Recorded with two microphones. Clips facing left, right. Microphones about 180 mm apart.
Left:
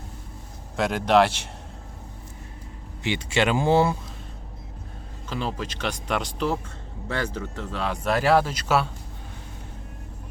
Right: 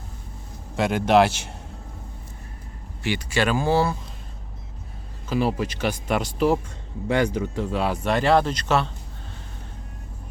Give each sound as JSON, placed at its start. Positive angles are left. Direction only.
{"t": 0.8, "sound": "speech", "side_deg": 0}
{"t": 3.0, "sound": "speech", "side_deg": 20}
{"t": 5.3, "sound": "speech", "side_deg": -10}
{"t": 8.0, "sound": "speech", "side_deg": 5}